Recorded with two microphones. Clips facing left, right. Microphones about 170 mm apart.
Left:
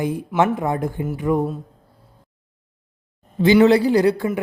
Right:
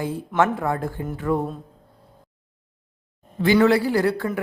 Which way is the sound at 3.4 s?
20° left (ahead or behind).